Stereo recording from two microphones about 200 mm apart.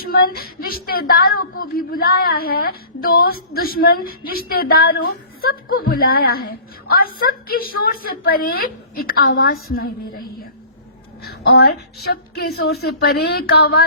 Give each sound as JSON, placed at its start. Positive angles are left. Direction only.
{"t": 0.0, "sound": "a woman's voice", "side_deg": 50}
{"t": 12.1, "sound": "a woman's voice", "side_deg": 50}